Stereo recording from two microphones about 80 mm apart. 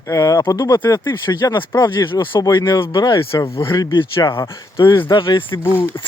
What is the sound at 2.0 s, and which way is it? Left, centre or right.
Speech, left.